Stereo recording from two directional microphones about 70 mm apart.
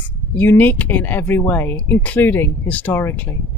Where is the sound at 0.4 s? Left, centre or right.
Left.